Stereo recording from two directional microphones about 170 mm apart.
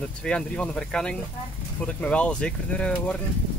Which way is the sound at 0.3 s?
5° left (ahead or behind).